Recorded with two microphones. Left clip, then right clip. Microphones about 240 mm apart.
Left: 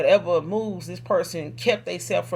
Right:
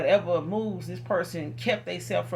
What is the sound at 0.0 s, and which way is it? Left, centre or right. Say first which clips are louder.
Speech: left 4 dB; left.